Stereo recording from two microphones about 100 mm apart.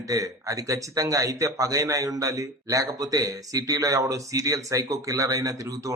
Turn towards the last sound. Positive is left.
turn(degrees=-35)  # may be behind; listen again after turning